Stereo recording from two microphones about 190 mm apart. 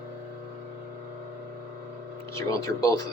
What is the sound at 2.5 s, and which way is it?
Speech, 15° left (ahead or behind).